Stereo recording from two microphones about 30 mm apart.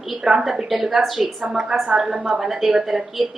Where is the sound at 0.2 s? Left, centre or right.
Right; by 1.3 s centre.